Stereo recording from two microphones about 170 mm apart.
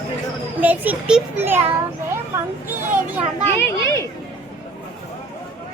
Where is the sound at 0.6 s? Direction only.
10° right (ahead or behind).